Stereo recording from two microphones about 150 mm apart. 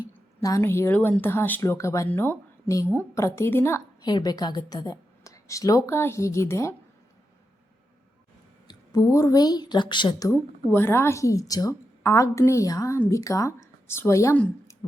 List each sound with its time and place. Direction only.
0.4 s speech: 20° left (ahead or behind)
4.0 s a woman's voice: 25° left (ahead or behind)
8.6 s a woman's voice: 25° left (ahead or behind)
10.3 s a woman's voice: 15° left (ahead or behind)